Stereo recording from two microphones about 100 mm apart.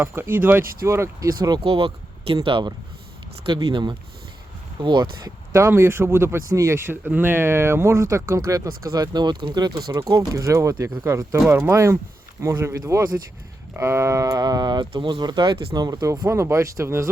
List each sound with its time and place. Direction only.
0.0 s speech: 20° right (ahead or behind)
1.4 s speech: 45° right (ahead or behind)
1.6 s speech: 65° right (ahead or behind)
5.5 s speech: 25° right (ahead or behind); by 9.9 s 45° right (ahead or behind)
9.9 s speech: 30° right (ahead or behind)